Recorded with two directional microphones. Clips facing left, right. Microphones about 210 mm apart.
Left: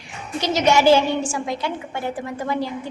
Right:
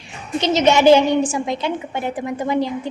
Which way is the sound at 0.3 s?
20° right (ahead or behind).